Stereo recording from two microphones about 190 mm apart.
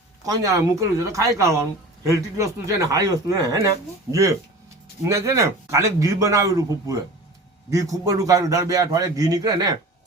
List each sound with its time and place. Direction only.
0.3 s a man's voice: 20° right (ahead or behind)
2.7 s a man's voice: 15° right (ahead or behind)